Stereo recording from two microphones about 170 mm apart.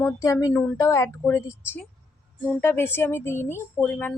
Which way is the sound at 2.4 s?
15° left (ahead or behind).